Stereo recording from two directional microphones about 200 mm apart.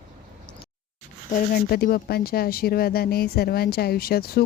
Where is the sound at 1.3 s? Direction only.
45° left (ahead or behind).